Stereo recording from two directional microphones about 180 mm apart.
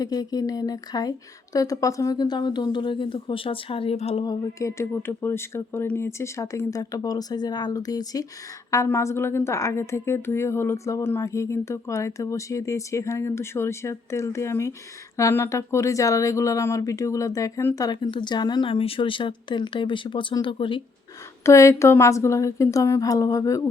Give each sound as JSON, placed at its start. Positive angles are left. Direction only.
{"t": 0.0, "sound": "a woman's voice", "side_deg": 20}
{"t": 21.4, "sound": "a woman's voice", "side_deg": 15}